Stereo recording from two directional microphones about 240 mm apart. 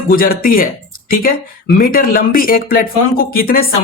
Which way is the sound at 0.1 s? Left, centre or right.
Left.